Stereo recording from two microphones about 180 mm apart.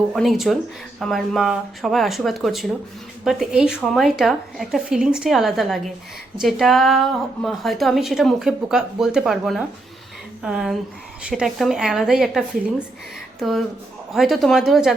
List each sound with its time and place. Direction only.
0.1 s a woman's voice: centre (ahead or behind)